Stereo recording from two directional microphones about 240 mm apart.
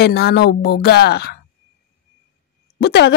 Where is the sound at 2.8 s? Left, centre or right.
Left.